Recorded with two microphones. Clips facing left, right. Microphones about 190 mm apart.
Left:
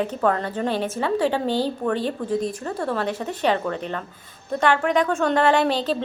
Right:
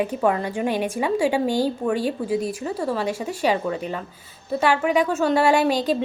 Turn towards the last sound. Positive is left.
turn(degrees=-10)  # may be behind; listen again after turning